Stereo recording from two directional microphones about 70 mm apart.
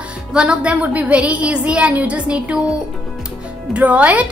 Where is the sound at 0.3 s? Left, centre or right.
Centre.